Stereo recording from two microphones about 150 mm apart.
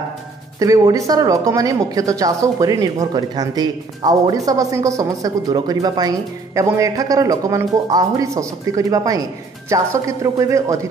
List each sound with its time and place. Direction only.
0.6 s speech: 20° right (ahead or behind)